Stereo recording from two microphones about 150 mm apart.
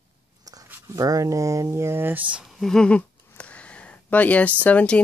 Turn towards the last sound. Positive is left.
turn(degrees=10)  # may be behind; listen again after turning